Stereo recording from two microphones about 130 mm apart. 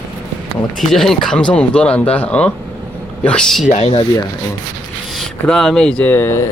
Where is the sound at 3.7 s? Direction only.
55° left (ahead or behind).